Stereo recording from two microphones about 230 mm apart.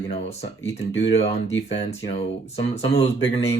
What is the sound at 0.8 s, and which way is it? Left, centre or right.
Speech, left.